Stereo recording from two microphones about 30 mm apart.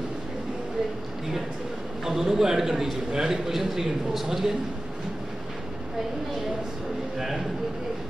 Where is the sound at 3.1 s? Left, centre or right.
Right.